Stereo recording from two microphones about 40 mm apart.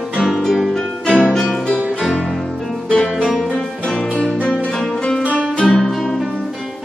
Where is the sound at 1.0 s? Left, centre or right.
Left.